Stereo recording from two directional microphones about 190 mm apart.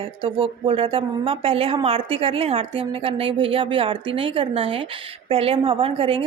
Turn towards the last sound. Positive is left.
turn(degrees=-30)  # may be behind; listen again after turning